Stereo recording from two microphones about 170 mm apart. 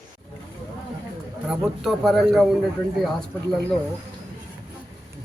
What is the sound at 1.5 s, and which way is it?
A man's voice, centre (ahead or behind).